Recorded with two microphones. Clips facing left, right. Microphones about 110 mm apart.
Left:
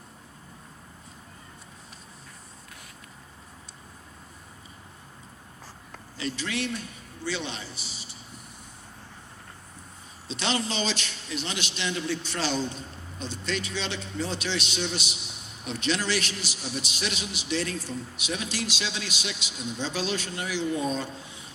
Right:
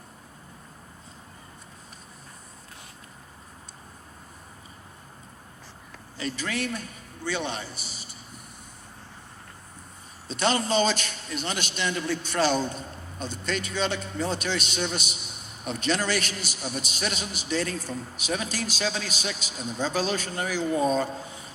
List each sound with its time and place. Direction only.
6.1 s a man's voice: 45° right (ahead or behind)
10.2 s a man's voice: 45° right (ahead or behind)